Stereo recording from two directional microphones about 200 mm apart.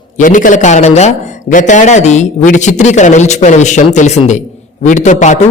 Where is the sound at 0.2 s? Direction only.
40° left (ahead or behind).